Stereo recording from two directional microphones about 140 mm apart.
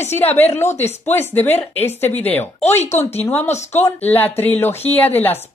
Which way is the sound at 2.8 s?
50° left (ahead or behind).